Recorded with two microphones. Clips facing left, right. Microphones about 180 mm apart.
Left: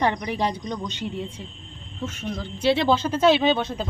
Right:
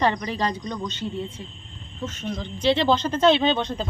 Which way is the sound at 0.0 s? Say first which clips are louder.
Even; 15° left (ahead or behind).